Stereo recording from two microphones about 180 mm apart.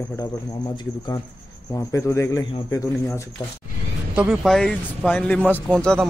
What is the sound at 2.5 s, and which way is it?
Speech, 20° left (ahead or behind).